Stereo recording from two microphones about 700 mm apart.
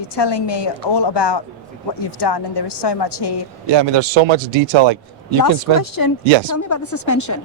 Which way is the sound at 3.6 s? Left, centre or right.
Right.